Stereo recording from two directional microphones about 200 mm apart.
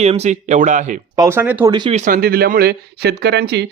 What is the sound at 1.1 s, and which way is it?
Speech, 15° right (ahead or behind).